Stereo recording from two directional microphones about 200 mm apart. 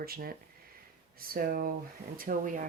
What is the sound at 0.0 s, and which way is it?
Speech, 50° right (ahead or behind).